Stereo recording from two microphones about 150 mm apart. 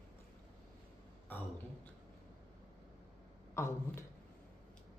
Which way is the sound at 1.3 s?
10° left (ahead or behind).